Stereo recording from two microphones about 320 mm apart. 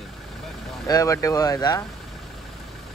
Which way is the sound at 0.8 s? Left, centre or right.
Centre.